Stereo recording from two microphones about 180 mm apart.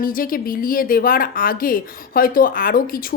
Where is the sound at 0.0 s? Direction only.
50° left (ahead or behind).